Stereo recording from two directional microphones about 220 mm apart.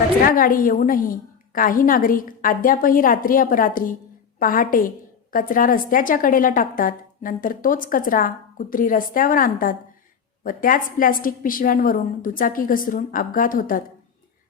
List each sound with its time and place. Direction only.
0.3 s a woman's voice: 40° left (ahead or behind)